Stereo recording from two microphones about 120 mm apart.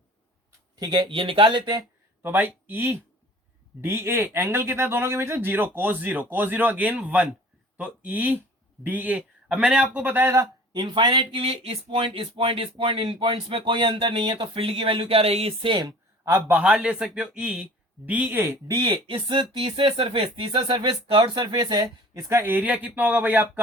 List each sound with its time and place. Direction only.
0.8 s speech: 35° right (ahead or behind)
2.2 s a man's voice: 15° right (ahead or behind)
10.3 s speech: 35° right (ahead or behind); by 15.8 s 50° right (ahead or behind)
15.8 s a sound: 30° right (ahead or behind)
16.3 s a man's voice: 15° right (ahead or behind)
18.7 s speech: 40° right (ahead or behind)
22.1 s a man's voice: 20° right (ahead or behind)